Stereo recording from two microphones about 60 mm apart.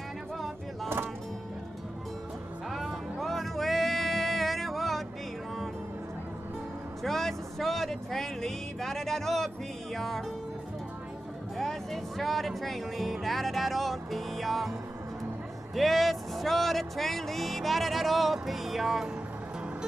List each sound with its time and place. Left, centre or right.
2.7 s music: centre
7.0 s speech: centre
11.5 s speech: centre
15.7 s speech: centre